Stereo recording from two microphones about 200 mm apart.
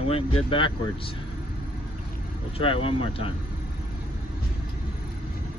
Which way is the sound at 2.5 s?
25° left (ahead or behind).